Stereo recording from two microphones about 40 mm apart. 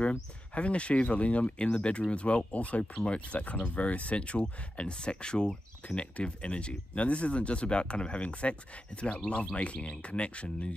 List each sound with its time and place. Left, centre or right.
0.6 s speech: left